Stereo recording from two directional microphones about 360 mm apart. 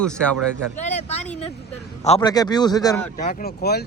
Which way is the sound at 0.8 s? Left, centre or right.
Centre.